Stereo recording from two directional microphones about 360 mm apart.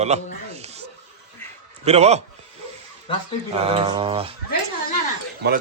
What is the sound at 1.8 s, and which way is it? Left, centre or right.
Speech, centre.